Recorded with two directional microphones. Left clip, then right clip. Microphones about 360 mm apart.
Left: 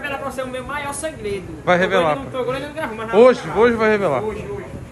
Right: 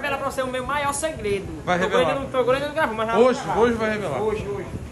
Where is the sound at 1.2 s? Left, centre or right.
Centre.